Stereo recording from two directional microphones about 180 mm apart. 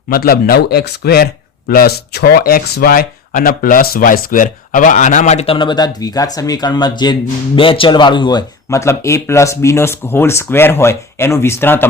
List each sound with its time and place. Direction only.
0.1 s speech: 55° left (ahead or behind); by 11.9 s 10° left (ahead or behind)